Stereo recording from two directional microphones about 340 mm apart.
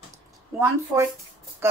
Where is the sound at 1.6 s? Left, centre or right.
Centre.